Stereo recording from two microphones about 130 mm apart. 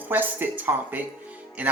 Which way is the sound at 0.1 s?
15° right (ahead or behind).